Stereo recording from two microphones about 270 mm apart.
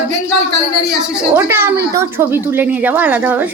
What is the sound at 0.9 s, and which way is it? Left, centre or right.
A woman's voice, centre.